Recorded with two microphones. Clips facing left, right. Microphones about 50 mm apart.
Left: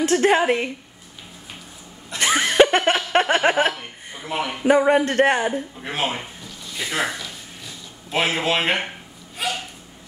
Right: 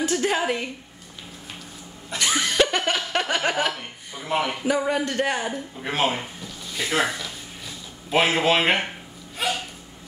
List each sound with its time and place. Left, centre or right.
0.0 s a sound: left
0.4 s a woman's voice: left
2.1 s laughter: left
3.1 s a sound: left
4.2 s speech: centre
4.6 s a man's voice: left
5.5 s speech: centre